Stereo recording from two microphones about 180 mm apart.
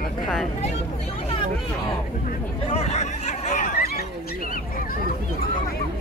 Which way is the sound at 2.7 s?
35° left (ahead or behind).